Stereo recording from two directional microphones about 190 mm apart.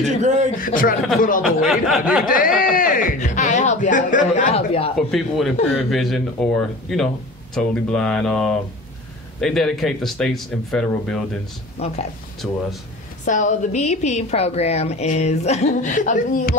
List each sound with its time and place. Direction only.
0.6 s a man's voice: 45° left (ahead or behind)
1.4 s a man's voice: centre (ahead or behind)
2.2 s a man's voice: 45° left (ahead or behind)
4.9 s a man's voice: centre (ahead or behind)
11.8 s a woman's voice: 35° left (ahead or behind)
12.4 s a man's voice: centre (ahead or behind)
13.2 s a woman's voice: 40° left (ahead or behind)